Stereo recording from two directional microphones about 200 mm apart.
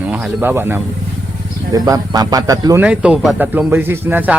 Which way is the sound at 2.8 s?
5° right (ahead or behind).